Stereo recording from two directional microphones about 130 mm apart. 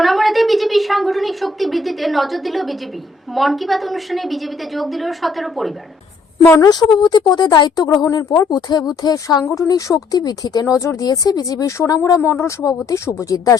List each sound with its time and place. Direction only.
0.0 s a sound: centre (ahead or behind)
3.3 s a woman's voice: centre (ahead or behind)
6.6 s speech: 30° left (ahead or behind)